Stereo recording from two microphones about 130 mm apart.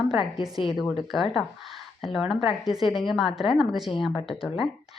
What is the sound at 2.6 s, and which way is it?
A woman's voice, centre (ahead or behind).